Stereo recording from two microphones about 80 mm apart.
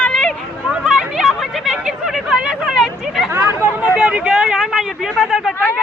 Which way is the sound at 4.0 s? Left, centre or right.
Centre.